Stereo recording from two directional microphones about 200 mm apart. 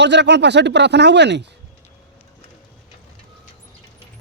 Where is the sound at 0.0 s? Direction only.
60° right (ahead or behind).